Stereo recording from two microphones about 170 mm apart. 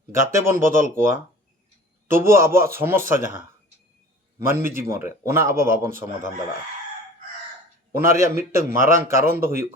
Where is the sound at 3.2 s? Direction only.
55° right (ahead or behind).